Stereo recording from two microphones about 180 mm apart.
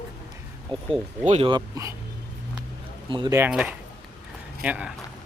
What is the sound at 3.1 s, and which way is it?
Speech, 25° right (ahead or behind).